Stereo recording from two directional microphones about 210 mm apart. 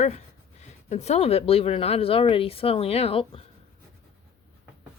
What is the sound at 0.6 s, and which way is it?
Speech, 35° left (ahead or behind).